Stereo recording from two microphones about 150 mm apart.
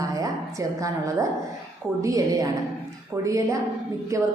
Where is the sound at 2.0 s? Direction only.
20° right (ahead or behind).